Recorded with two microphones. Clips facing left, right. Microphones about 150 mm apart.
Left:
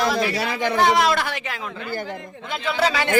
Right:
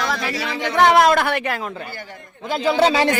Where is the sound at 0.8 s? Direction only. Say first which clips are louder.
Right 6 dB; 60° right (ahead or behind).